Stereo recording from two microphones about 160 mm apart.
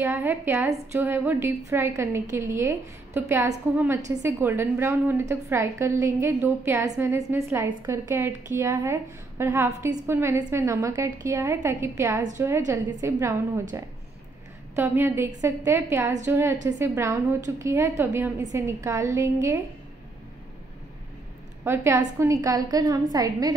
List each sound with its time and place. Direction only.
0.0 s a woman's voice: 10° right (ahead or behind)
21.6 s a woman's voice: 15° right (ahead or behind)